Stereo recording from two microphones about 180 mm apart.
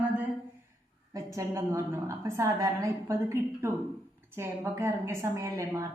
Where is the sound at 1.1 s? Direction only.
15° right (ahead or behind).